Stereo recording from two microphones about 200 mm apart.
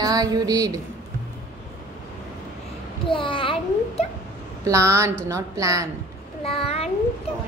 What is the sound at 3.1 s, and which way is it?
Speech, 25° left (ahead or behind).